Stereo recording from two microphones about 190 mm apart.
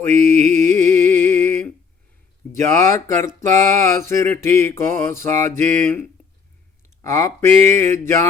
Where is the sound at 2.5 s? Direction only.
40° right (ahead or behind).